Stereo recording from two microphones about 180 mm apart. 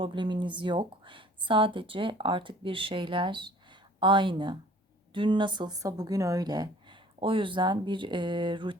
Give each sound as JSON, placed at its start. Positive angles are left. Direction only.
{"t": 0.0, "sound": "speech", "side_deg": -25}